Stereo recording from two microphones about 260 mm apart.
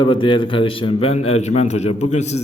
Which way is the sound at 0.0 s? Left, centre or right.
Centre.